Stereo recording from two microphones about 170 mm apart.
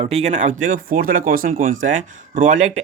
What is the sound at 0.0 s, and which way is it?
Speech, 40° right (ahead or behind).